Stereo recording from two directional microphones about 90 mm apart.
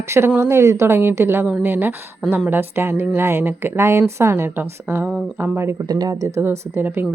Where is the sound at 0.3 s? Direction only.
30° right (ahead or behind).